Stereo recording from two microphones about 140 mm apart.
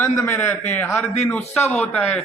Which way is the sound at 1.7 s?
5° left (ahead or behind).